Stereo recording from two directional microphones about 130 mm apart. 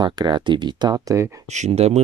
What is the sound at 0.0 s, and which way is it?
Speech, 35° right (ahead or behind).